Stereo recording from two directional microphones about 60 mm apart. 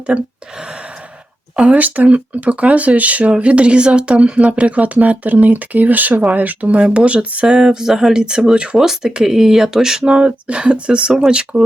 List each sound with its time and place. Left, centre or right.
0.1 s speech: centre
1.5 s speech: right